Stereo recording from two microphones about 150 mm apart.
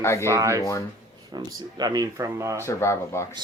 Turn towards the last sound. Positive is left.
turn(degrees=20)  # may be behind; listen again after turning